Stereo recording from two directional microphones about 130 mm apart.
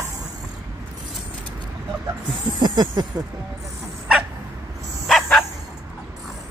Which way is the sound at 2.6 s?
30° right (ahead or behind).